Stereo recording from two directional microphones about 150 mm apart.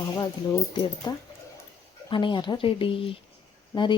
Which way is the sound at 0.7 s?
30° left (ahead or behind).